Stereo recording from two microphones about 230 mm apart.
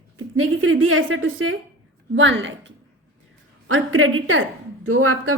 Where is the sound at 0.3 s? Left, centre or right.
Right.